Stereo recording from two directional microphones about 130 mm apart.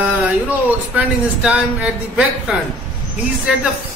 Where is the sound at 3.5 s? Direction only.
10° right (ahead or behind).